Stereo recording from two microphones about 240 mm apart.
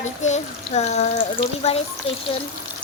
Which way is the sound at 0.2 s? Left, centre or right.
Left.